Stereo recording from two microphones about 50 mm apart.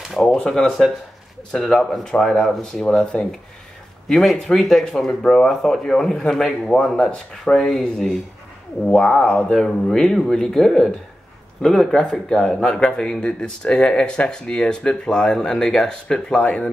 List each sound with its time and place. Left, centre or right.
0.1 s speech: centre